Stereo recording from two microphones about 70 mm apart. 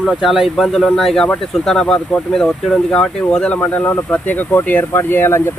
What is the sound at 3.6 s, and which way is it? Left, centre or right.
Speech, left.